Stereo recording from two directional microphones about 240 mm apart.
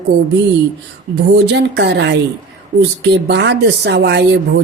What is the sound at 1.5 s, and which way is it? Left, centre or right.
Speech, right.